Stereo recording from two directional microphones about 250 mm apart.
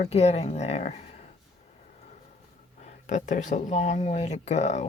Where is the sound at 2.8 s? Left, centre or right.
Left.